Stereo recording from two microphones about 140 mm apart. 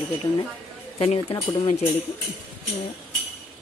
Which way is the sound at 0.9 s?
45° left (ahead or behind).